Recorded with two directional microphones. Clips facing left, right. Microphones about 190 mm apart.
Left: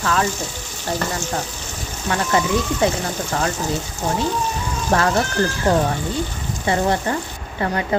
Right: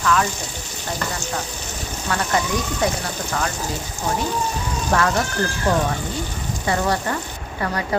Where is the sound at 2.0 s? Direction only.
25° left (ahead or behind).